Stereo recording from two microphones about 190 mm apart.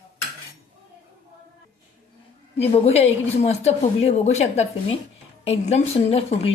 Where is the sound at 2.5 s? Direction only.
30° left (ahead or behind).